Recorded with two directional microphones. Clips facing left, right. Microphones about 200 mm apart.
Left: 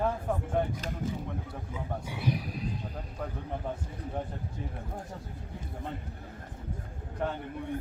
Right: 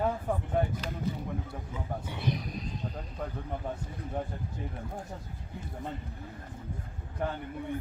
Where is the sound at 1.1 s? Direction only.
45° left (ahead or behind).